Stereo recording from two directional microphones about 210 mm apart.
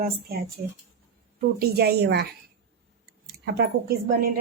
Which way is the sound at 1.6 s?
50° right (ahead or behind).